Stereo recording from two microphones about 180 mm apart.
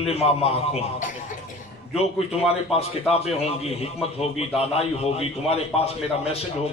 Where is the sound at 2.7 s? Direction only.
35° left (ahead or behind).